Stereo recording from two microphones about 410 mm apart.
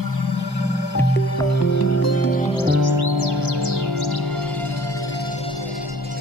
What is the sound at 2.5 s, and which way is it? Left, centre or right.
Music, left.